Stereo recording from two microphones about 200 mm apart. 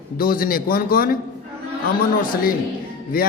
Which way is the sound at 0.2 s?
45° left (ahead or behind).